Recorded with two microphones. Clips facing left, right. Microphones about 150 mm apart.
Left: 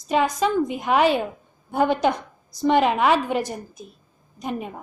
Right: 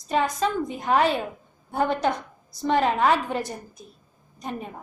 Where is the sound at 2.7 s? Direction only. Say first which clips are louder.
Left 2 dB; 15° left (ahead or behind).